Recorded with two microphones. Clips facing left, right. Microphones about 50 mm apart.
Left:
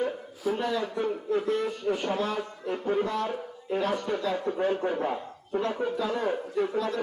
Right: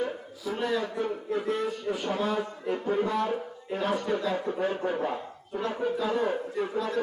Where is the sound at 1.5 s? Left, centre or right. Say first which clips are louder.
Left 2 dB; centre.